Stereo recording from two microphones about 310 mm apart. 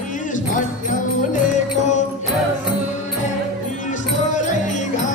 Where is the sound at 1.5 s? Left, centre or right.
Left.